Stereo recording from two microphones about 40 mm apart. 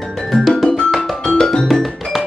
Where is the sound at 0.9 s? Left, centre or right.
Centre.